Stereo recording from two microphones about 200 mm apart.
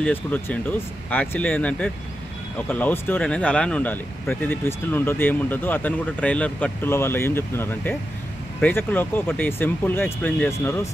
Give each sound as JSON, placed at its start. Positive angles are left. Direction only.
{"t": 0.0, "sound": "speech", "side_deg": 5}